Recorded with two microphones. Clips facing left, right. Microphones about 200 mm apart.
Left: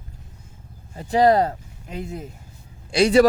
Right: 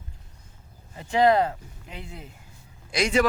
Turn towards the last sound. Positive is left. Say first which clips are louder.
# left 8 dB
turn(degrees=35)  # may be behind; listen again after turning